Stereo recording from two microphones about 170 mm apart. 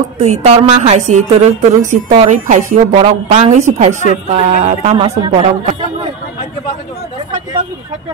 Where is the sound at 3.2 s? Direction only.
40° right (ahead or behind).